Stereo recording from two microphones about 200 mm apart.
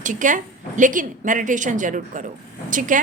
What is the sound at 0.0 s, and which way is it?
A woman's voice, 40° right (ahead or behind).